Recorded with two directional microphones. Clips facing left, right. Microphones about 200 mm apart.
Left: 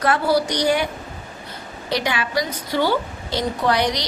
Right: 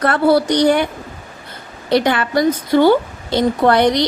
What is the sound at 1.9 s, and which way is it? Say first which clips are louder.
A woman's voice: right 8 dB; 55° right (ahead or behind).